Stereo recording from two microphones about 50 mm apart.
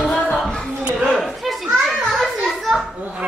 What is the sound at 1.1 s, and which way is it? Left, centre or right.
Children playing, centre.